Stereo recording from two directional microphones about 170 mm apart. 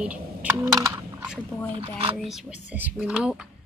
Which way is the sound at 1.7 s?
30° right (ahead or behind).